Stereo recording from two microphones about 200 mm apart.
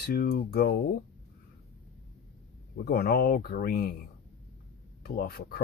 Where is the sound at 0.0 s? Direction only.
50° left (ahead or behind).